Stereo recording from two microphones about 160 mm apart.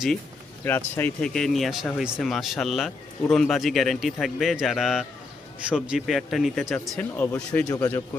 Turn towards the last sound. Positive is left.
turn(degrees=20)  # may be behind; listen again after turning